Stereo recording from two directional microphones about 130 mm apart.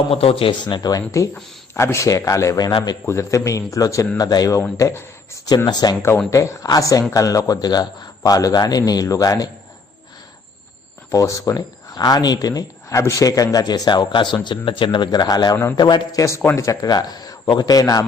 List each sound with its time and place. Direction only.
0.1 s a man's voice: 45° left (ahead or behind); by 3.0 s 30° left (ahead or behind)
3.1 s a man's voice: 20° left (ahead or behind)
11.1 s speech: 25° left (ahead or behind)
16.2 s a man's voice: 20° left (ahead or behind)